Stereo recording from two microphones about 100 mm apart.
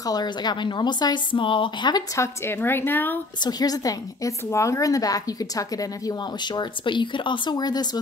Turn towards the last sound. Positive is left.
turn(degrees=40)  # may be behind; listen again after turning